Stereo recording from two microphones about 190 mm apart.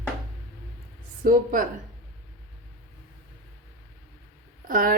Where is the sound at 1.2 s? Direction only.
45° right (ahead or behind).